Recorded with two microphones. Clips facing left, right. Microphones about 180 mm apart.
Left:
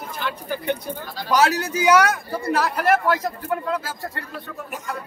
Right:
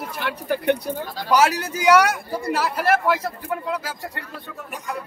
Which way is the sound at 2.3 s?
10° right (ahead or behind).